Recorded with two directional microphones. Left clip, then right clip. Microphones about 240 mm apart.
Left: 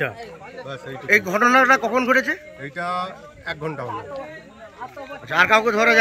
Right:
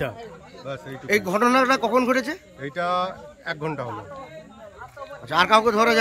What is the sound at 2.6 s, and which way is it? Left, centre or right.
A man's voice, right.